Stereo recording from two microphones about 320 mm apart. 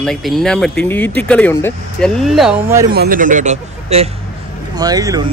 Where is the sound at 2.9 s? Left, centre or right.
Right; by 5.2 s centre.